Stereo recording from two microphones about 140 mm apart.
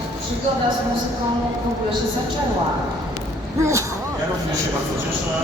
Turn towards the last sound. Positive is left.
turn(degrees=-20)  # may be behind; listen again after turning